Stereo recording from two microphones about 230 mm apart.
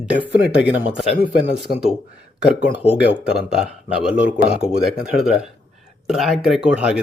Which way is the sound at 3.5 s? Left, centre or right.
Centre.